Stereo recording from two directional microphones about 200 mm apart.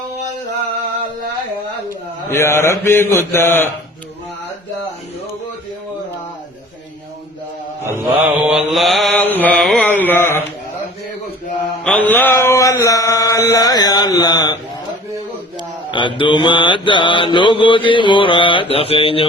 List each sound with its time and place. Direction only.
2.3 s mantra: 15° left (ahead or behind)
7.9 s mantra: 10° right (ahead or behind); by 10.4 s 10° left (ahead or behind)
11.8 s mantra: 5° left (ahead or behind)
15.9 s mantra: 25° left (ahead or behind)